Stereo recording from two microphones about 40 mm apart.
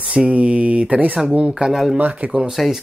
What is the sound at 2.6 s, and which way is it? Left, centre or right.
Speech, centre.